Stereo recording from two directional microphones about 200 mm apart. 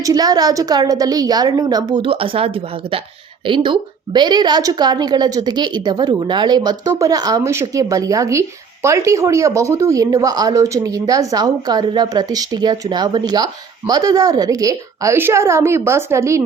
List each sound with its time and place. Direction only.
0.0 s a woman's voice: 20° right (ahead or behind)